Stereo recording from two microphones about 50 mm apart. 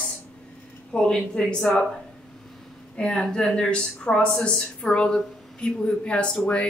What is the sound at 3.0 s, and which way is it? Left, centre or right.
A woman's voice, centre.